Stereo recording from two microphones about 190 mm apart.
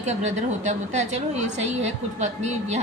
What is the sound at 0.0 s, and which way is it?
A woman's voice, 35° right (ahead or behind).